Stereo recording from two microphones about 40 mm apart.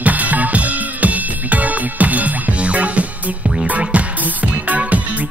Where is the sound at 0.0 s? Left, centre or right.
Right.